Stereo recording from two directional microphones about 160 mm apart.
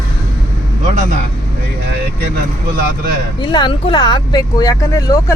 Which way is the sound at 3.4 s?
30° left (ahead or behind).